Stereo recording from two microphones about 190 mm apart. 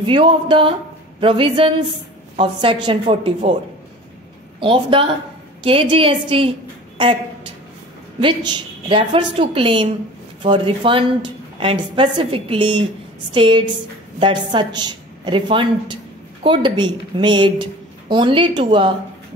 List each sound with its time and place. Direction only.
0.0 s a woman's voice: 30° right (ahead or behind)
4.6 s a woman's voice: 25° right (ahead or behind)
8.2 s a woman's voice: 25° right (ahead or behind)